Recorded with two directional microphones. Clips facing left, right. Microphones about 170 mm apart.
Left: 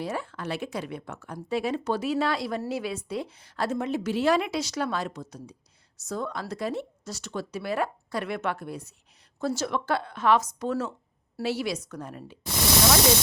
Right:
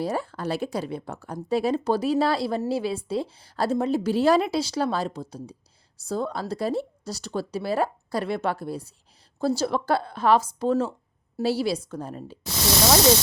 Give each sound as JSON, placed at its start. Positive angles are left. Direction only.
{"t": 0.0, "sound": "speech", "side_deg": -35}